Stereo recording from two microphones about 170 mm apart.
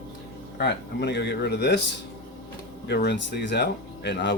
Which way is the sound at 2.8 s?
80° left.